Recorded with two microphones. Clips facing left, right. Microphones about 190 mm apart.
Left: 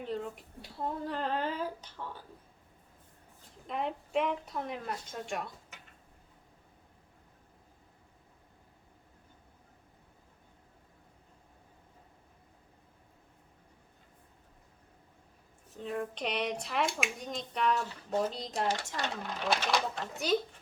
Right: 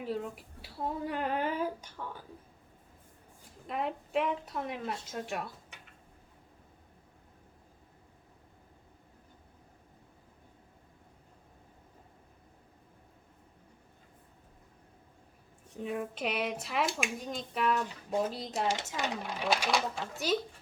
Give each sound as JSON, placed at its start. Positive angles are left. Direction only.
{"t": 0.0, "sound": "speech", "side_deg": -5}
{"t": 3.7, "sound": "speech", "side_deg": 0}
{"t": 15.8, "sound": "speech", "side_deg": -5}
{"t": 17.7, "sound": "speech", "side_deg": -15}
{"t": 18.3, "sound": "speech", "side_deg": -5}
{"t": 18.9, "sound": "speech", "side_deg": -15}